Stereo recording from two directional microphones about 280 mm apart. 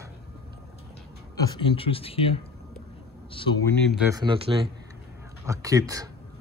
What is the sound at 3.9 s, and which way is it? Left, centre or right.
Speech, centre.